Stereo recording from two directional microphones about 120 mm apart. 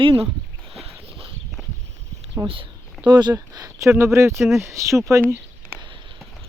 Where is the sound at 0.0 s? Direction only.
45° right (ahead or behind).